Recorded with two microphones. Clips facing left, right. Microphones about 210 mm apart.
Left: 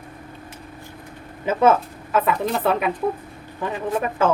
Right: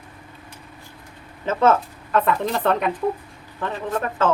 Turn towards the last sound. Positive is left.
turn(degrees=10)  # may be behind; listen again after turning